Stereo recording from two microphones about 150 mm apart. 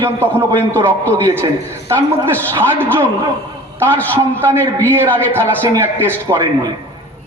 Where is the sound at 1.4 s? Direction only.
20° right (ahead or behind).